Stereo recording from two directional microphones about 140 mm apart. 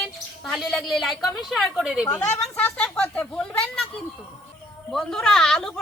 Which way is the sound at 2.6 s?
10° left (ahead or behind).